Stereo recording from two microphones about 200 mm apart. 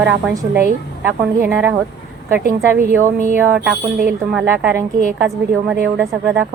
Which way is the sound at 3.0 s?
40° right (ahead or behind).